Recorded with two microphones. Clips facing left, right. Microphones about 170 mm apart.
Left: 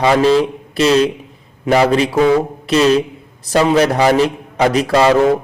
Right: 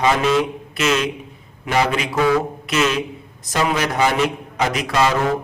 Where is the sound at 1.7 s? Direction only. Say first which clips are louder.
Left 7 dB; 35° left (ahead or behind).